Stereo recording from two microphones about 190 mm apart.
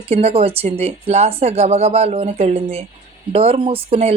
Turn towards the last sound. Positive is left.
turn(degrees=-30)  # may be behind; listen again after turning